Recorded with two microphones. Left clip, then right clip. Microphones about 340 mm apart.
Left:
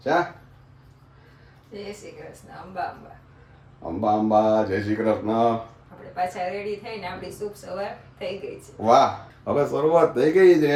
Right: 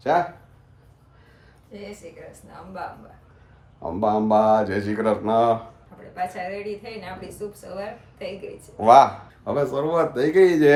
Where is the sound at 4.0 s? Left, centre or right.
Right.